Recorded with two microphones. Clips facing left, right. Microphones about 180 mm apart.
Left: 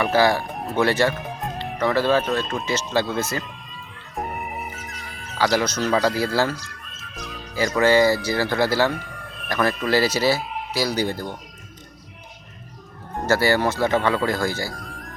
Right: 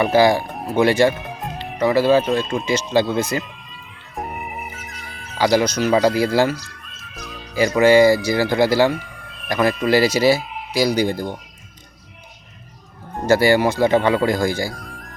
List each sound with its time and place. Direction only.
0.0 s speech: 15° right (ahead or behind)
4.1 s music: centre (ahead or behind)
5.4 s speech: 15° right (ahead or behind)
13.2 s speech: 15° right (ahead or behind)
14.8 s music: centre (ahead or behind)